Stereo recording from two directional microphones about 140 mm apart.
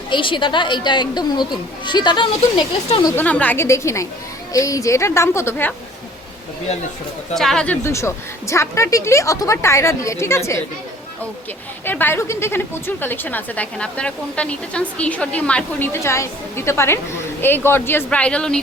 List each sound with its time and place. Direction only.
0.1 s speech: 35° left (ahead or behind)
3.2 s speech: 10° left (ahead or behind)
7.3 s speech: 5° left (ahead or behind)
7.9 s speech: 20° left (ahead or behind)
11.9 s speech: 15° left (ahead or behind)